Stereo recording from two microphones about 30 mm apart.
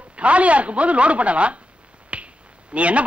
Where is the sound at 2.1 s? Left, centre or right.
Right.